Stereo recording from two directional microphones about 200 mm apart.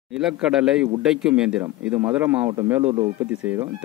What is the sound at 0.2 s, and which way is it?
Speech, 5° right (ahead or behind).